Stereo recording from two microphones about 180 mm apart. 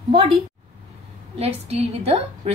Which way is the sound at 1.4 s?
35° right (ahead or behind).